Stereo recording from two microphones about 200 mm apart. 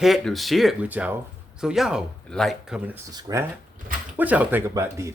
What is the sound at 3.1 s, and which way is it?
Speech, 15° right (ahead or behind).